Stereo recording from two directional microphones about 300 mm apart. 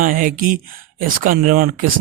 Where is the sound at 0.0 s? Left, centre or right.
Right.